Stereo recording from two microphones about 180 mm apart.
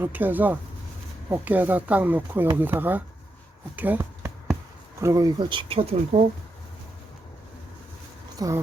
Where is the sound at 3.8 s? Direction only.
10° right (ahead or behind).